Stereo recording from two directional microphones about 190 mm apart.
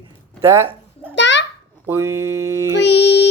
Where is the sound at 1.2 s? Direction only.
70° left (ahead or behind).